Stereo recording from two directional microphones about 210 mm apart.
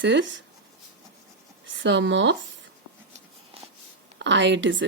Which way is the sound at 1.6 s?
60° right (ahead or behind).